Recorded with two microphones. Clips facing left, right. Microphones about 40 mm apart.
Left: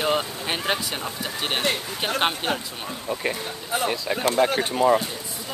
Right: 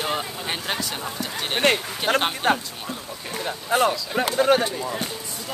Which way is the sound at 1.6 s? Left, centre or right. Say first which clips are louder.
Right 4 dB; right.